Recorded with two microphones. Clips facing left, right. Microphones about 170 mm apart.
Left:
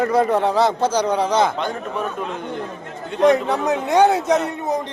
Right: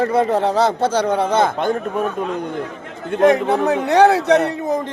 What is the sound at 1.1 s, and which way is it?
Speech, 55° right (ahead or behind).